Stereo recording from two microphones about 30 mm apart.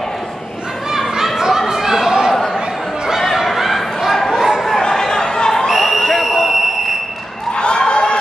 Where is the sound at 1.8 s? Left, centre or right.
Centre.